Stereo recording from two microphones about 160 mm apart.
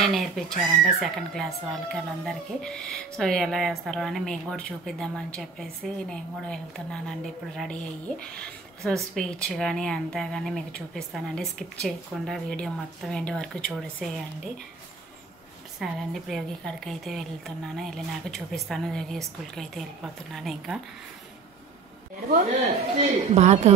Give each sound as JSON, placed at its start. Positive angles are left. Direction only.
{"t": 0.0, "sound": "speech", "side_deg": 0}
{"t": 15.8, "sound": "speech", "side_deg": 0}
{"t": 22.9, "sound": "a woman's voice", "side_deg": -45}